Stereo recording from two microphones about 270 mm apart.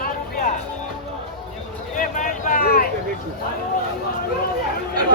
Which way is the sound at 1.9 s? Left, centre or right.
Left.